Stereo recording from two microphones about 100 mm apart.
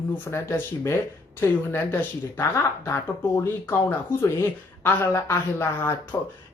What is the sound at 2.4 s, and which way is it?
Speech, 25° left (ahead or behind).